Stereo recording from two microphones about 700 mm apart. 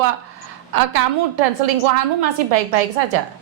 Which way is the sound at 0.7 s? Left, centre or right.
Right.